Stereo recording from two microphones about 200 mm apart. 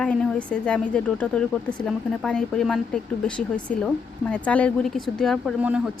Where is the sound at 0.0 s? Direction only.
5° left (ahead or behind).